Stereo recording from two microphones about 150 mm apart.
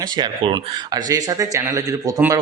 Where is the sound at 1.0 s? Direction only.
25° right (ahead or behind).